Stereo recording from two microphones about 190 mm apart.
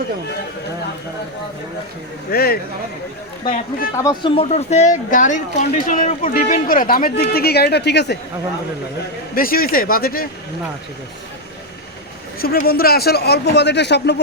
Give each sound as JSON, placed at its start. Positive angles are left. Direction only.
{"t": 2.3, "sound": "speech", "side_deg": 55}
{"t": 3.9, "sound": "speech", "side_deg": 15}
{"t": 4.3, "sound": "speech", "side_deg": 30}
{"t": 9.3, "sound": "speech", "side_deg": 50}
{"t": 12.4, "sound": "a man's voice", "side_deg": 50}